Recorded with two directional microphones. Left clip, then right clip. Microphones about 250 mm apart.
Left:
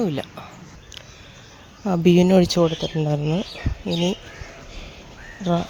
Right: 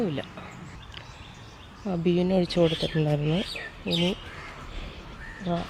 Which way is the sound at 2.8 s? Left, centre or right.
Centre.